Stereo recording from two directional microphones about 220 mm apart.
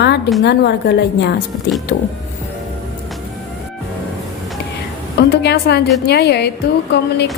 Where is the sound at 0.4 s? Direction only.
50° left (ahead or behind).